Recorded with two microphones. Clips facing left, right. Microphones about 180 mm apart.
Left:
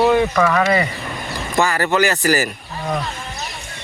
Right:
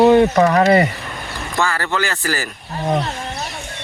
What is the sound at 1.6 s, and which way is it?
Speech, 15° left (ahead or behind).